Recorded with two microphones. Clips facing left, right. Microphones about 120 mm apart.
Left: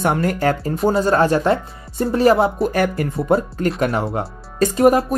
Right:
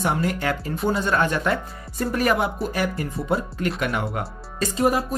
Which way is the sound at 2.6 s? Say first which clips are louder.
Left 7 dB; 55° left (ahead or behind).